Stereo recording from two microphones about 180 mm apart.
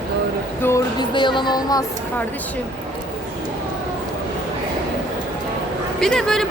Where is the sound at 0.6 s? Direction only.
15° left (ahead or behind).